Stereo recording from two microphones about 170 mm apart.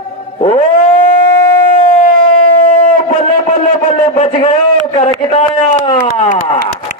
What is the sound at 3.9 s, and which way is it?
A man's voice, 35° left (ahead or behind).